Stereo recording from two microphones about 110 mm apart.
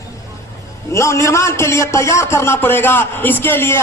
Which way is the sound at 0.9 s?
25° left (ahead or behind).